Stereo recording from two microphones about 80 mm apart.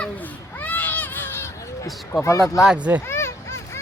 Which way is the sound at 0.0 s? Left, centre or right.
Left.